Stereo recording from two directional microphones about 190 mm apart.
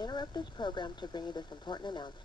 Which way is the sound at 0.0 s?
20° left (ahead or behind).